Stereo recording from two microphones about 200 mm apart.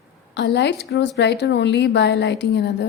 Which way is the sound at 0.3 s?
60° left (ahead or behind).